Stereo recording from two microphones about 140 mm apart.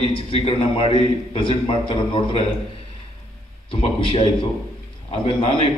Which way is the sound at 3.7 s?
45° left (ahead or behind).